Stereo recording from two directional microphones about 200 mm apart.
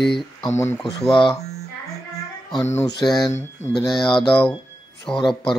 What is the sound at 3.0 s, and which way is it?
Speech, centre (ahead or behind).